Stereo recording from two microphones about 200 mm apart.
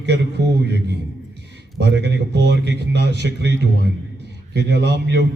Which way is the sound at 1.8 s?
60° right (ahead or behind).